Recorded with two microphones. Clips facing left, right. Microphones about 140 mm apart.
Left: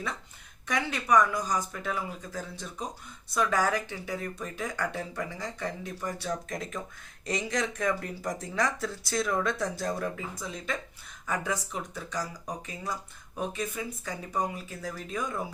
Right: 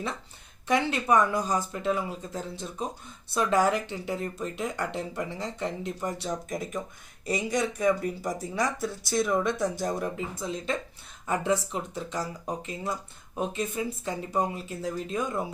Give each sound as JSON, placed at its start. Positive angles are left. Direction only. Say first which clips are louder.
{"t": 0.7, "sound": "speech", "louder": "right 2 dB", "side_deg": -25}
{"t": 7.3, "sound": "speech", "louder": "right 3 dB", "side_deg": -5}
{"t": 7.8, "sound": "speech", "louder": "right 5 dB", "side_deg": -20}